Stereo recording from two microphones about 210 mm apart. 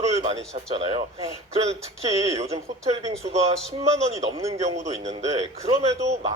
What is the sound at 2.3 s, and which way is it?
A man's voice, 30° right (ahead or behind).